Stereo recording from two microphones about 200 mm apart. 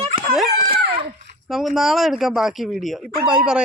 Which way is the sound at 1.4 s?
Centre (ahead or behind).